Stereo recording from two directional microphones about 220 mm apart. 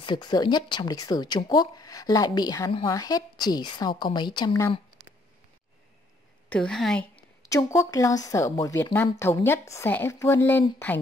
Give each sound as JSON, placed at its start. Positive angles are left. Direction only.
{"t": 0.0, "sound": "speech", "side_deg": 20}
{"t": 6.5, "sound": "a woman's voice", "side_deg": 5}
{"t": 7.2, "sound": "speech", "side_deg": 15}